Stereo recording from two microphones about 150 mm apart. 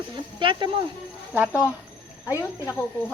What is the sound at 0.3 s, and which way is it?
Speech, 35° right (ahead or behind).